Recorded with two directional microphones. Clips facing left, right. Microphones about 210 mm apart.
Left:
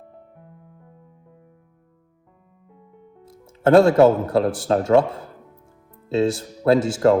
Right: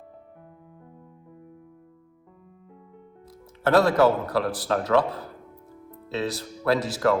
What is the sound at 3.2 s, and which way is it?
A man's voice, 25° left (ahead or behind).